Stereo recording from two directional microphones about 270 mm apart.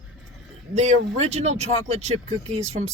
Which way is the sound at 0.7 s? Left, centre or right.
Right.